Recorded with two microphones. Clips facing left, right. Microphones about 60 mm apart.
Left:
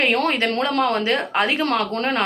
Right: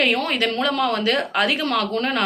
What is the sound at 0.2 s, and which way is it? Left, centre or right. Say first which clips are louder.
Speech: left 2 dB; left.